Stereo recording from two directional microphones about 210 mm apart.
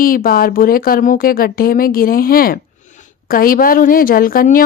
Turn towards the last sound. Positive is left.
turn(degrees=45)  # may be behind; listen again after turning